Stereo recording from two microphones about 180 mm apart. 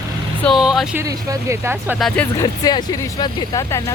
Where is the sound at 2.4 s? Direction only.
20° left (ahead or behind).